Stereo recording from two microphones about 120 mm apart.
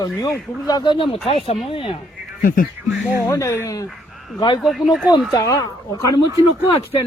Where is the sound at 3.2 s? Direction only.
25° left (ahead or behind).